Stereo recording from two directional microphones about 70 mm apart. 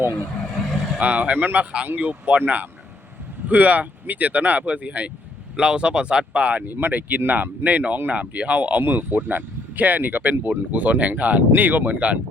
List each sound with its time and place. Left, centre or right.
0.7 s vehicle: centre
0.9 s speech: centre